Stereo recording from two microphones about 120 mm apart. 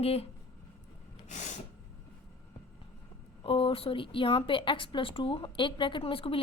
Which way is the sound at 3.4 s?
50° left (ahead or behind).